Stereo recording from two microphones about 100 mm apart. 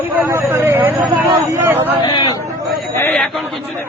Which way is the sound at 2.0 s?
50° left (ahead or behind).